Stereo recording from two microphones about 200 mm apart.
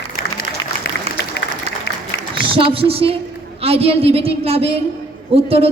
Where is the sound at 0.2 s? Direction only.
45° left (ahead or behind).